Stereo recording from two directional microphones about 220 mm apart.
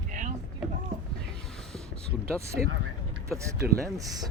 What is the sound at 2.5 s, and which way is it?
Speech, 50° right (ahead or behind).